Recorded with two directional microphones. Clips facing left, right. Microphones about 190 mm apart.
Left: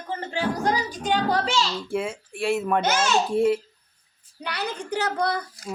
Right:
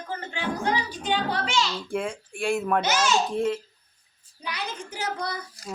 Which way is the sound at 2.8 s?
55° left (ahead or behind).